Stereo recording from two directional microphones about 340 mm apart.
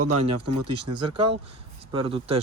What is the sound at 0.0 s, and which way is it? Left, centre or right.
Speech, right.